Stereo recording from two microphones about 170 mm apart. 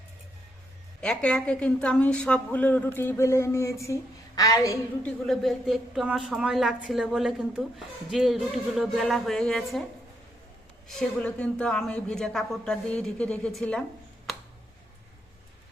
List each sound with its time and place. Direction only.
1.0 s a woman's voice: 5° left (ahead or behind)
5.0 s a woman's voice: centre (ahead or behind)
10.8 s a woman's voice: 5° left (ahead or behind)